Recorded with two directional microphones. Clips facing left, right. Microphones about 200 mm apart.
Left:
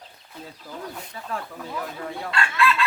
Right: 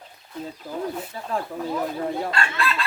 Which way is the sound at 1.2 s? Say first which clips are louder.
Right 3 dB; 30° right (ahead or behind).